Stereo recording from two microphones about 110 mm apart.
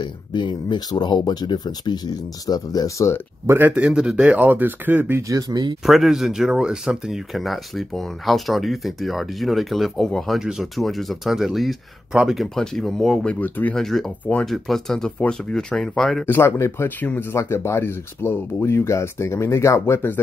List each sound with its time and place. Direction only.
0.0 s speech: 45° left (ahead or behind)
3.4 s speech: 15° right (ahead or behind)
5.3 s speech: 40° right (ahead or behind)
5.9 s speech: centre (ahead or behind); by 13.7 s 15° left (ahead or behind)
13.7 s speech: centre (ahead or behind)
16.3 s speech: 25° left (ahead or behind)